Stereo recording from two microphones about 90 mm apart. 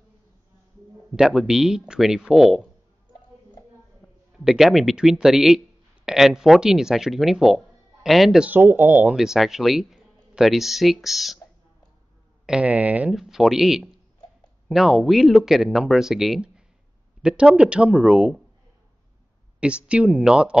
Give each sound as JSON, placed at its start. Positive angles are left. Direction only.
{"t": 1.1, "sound": "speech", "side_deg": -5}
{"t": 4.0, "sound": "speech", "side_deg": -5}
{"t": 8.5, "sound": "speech", "side_deg": -20}
{"t": 9.1, "sound": "speech", "side_deg": -5}
{"t": 12.4, "sound": "speech", "side_deg": -15}
{"t": 13.1, "sound": "speech", "side_deg": -5}
{"t": 19.6, "sound": "speech", "side_deg": -10}